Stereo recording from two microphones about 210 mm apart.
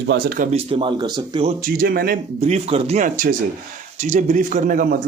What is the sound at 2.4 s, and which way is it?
Speech, 30° right (ahead or behind).